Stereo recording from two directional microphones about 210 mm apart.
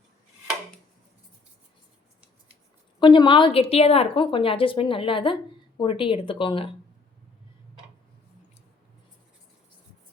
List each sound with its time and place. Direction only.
3.0 s a woman's voice: 25° left (ahead or behind)